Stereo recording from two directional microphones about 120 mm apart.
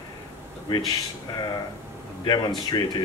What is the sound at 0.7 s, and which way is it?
Speech, 35° left (ahead or behind).